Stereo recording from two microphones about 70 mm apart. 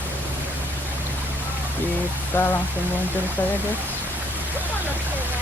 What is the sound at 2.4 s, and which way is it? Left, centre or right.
Speech, left.